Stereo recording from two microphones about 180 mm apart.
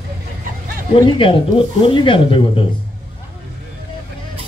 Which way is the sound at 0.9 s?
30° left (ahead or behind).